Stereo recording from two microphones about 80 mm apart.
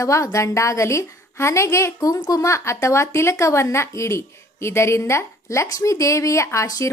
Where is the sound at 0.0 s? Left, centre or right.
Left.